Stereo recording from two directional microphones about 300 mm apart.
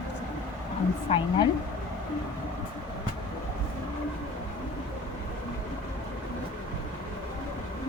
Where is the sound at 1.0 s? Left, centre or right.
Centre.